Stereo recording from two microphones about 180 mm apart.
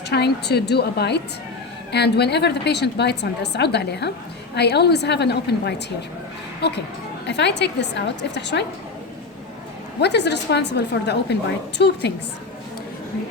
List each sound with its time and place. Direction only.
0.1 s a woman's voice: 65° left (ahead or behind)
10.0 s a woman's voice: 70° left (ahead or behind)